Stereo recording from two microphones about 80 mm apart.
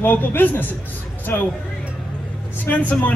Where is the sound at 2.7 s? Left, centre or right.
Left.